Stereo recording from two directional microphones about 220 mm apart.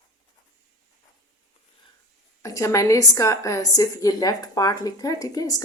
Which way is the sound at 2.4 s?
15° left (ahead or behind).